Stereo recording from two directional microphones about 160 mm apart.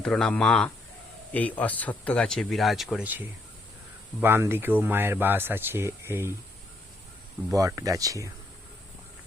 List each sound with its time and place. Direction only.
0.0 s speech: 5° left (ahead or behind); by 6.3 s 15° right (ahead or behind)
7.5 s speech: 20° right (ahead or behind)